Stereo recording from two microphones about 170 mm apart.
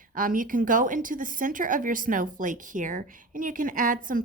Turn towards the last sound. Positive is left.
turn(degrees=-50)  # may be behind; listen again after turning